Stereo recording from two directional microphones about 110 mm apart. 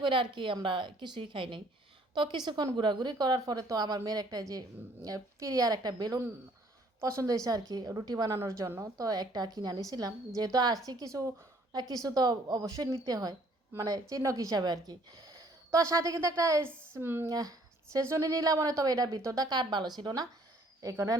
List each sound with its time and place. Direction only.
0.0 s a woman's voice: 50° right (ahead or behind); by 17.2 s 20° right (ahead or behind)
17.2 s a woman's voice: 35° right (ahead or behind)
20.9 s speech: 25° right (ahead or behind)